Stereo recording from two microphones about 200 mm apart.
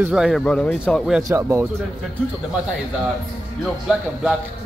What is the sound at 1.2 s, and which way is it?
Speech, 15° right (ahead or behind).